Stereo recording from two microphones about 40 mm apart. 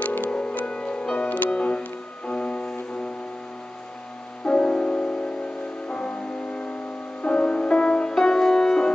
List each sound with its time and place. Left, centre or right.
0.0 s music: left
0.3 s music: left
1.1 s music: left
4.5 s music: left